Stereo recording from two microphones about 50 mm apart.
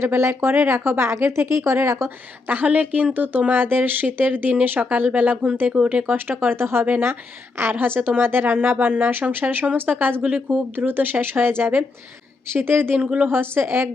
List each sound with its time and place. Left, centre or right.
0.0 s speech: right
2.5 s a woman's voice: right